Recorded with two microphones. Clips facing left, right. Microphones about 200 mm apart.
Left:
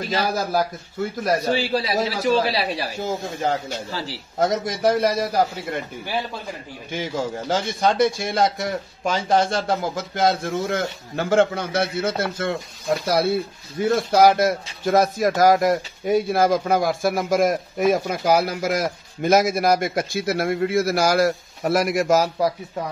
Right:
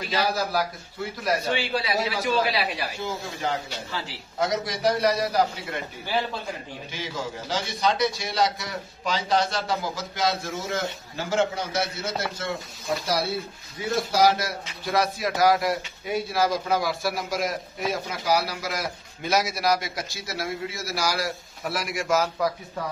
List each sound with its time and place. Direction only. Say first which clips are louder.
0.0 s speech: left 3 dB; 50° left (ahead or behind)
1.2 s a man's voice: left 4 dB; 35° left (ahead or behind)
6.9 s speech: left 8 dB; 50° left (ahead or behind)
13.7 s speech: left 6 dB; 55° left (ahead or behind)